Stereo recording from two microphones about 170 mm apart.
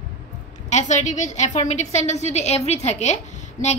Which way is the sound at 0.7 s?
45° left (ahead or behind).